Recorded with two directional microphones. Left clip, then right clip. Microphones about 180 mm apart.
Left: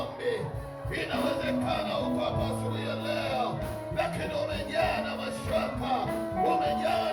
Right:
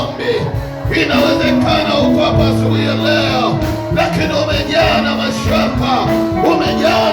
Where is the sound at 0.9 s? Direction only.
50° right (ahead or behind).